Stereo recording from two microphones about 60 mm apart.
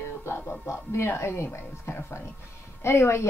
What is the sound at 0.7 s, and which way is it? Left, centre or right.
A woman's voice, left.